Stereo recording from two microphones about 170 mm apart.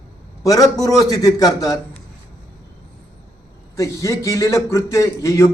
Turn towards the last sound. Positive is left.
turn(degrees=15)  # may be behind; listen again after turning